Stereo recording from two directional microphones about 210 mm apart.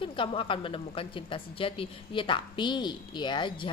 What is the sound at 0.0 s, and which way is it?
A woman's voice, 25° left (ahead or behind).